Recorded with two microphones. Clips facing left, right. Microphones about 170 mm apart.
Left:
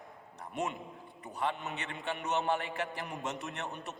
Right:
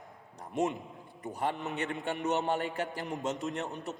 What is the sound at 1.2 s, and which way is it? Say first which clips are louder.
A man's voice: right 2 dB; 45° right (ahead or behind).